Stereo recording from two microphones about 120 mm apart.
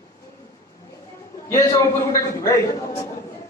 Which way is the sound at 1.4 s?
25° left (ahead or behind).